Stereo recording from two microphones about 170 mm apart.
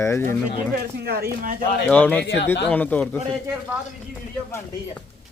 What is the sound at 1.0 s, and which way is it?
Speech, 65° right (ahead or behind).